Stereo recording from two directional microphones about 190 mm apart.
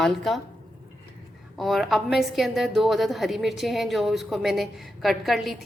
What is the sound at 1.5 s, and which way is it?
A woman's voice, centre (ahead or behind).